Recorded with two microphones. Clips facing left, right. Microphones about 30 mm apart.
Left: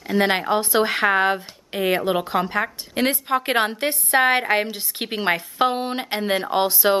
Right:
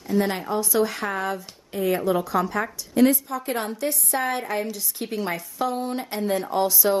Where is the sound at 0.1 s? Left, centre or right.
Left.